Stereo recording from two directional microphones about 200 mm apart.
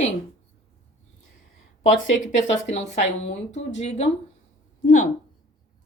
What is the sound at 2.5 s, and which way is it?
A woman's voice, 35° left (ahead or behind).